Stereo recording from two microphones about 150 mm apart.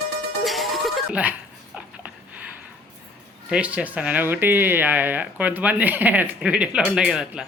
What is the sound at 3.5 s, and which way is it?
Speech, 5° right (ahead or behind).